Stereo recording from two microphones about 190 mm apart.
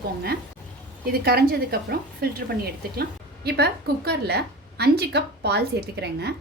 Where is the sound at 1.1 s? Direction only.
55° right (ahead or behind).